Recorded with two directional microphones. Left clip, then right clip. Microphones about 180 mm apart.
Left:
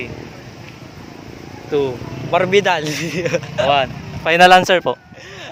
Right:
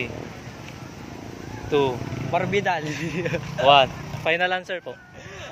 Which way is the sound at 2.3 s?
65° left (ahead or behind).